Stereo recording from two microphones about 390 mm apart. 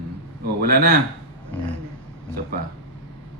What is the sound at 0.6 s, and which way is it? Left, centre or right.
Speech, right.